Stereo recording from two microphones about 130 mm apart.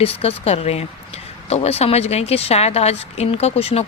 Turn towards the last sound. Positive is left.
turn(degrees=50)  # may be behind; listen again after turning